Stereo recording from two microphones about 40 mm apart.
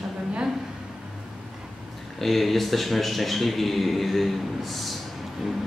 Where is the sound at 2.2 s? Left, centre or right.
Centre.